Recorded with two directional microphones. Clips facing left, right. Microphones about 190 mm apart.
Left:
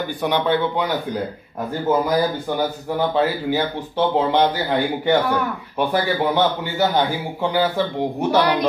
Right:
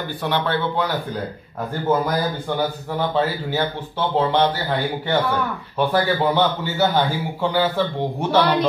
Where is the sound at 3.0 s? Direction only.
10° left (ahead or behind).